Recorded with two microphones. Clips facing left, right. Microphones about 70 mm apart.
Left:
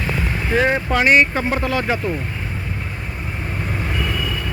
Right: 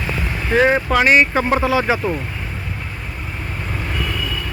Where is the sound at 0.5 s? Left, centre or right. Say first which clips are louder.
Right 3 dB; centre.